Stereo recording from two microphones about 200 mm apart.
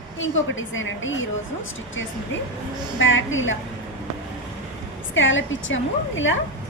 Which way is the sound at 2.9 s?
70° left (ahead or behind).